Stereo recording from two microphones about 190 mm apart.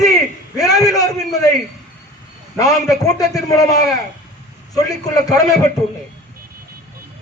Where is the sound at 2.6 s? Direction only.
20° left (ahead or behind).